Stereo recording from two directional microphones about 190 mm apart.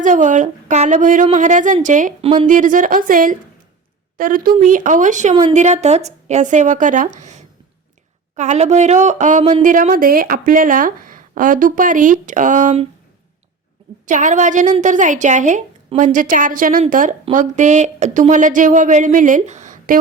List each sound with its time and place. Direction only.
0.0 s speech: 40° right (ahead or behind)
14.1 s speech: 40° right (ahead or behind)